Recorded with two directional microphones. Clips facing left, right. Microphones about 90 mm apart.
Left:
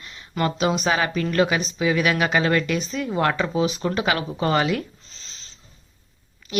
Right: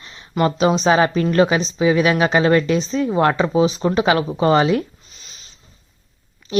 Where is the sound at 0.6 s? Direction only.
30° right (ahead or behind).